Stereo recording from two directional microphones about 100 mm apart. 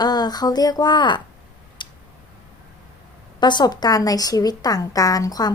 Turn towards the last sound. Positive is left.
turn(degrees=40)  # may be behind; listen again after turning